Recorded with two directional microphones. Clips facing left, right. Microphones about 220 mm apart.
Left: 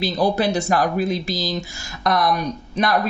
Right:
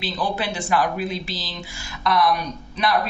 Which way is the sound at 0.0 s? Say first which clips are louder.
Left 7 dB; 40° left (ahead or behind).